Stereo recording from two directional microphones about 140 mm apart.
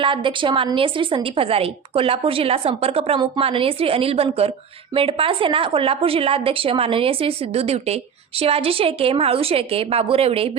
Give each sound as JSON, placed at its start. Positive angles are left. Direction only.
{"t": 0.0, "sound": "a woman's voice", "side_deg": -35}